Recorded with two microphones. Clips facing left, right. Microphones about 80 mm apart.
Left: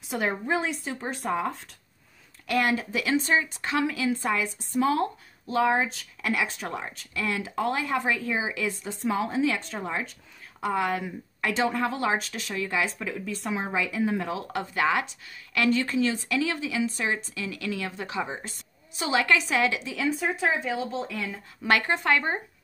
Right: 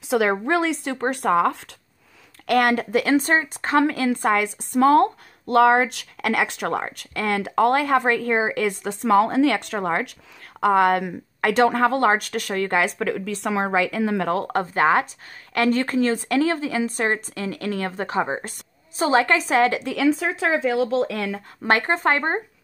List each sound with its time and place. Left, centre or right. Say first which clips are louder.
0.1 s speech: right 7 dB; right
2.4 s speech: right 6 dB; right
20.1 s speech: right 5 dB; right
21.6 s speech: right 4 dB; right